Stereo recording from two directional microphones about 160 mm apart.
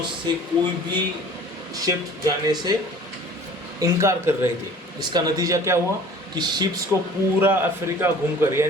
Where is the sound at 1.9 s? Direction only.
25° right (ahead or behind).